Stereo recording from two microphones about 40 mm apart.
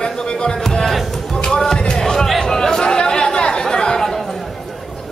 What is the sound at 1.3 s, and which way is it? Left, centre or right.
Music, centre.